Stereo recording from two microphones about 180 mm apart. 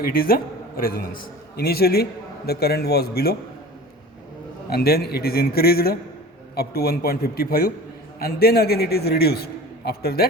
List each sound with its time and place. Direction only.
0.0 s a man's voice: 55° left (ahead or behind)
4.7 s a man's voice: 60° left (ahead or behind)